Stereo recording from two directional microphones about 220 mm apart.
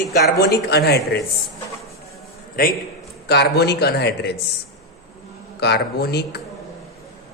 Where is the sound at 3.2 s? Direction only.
50° left (ahead or behind).